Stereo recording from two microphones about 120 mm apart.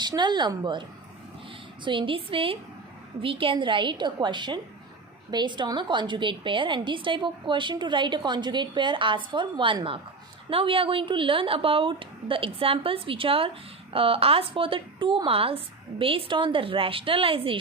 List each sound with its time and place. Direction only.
0.0 s a woman's voice: 35° right (ahead or behind)